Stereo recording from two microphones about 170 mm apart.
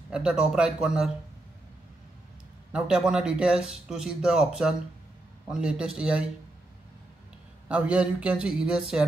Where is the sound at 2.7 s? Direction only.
5° right (ahead or behind).